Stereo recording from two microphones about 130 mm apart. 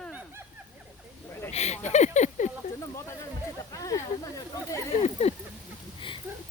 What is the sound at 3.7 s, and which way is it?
Speech, 25° left (ahead or behind).